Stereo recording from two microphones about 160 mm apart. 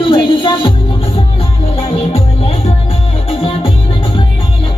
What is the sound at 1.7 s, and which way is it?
Music, 40° left (ahead or behind).